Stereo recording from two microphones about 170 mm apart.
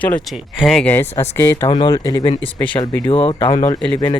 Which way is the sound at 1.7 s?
25° left (ahead or behind).